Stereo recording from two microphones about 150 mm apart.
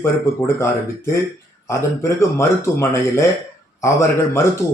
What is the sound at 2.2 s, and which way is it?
Speech, 20° left (ahead or behind).